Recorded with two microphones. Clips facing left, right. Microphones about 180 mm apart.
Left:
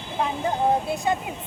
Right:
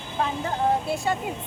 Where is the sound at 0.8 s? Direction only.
20° left (ahead or behind).